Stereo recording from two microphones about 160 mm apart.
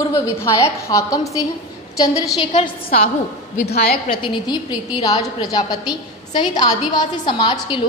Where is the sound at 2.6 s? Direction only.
35° left (ahead or behind).